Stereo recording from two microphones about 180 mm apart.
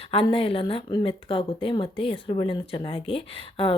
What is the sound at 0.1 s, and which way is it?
A woman's voice, 30° left (ahead or behind).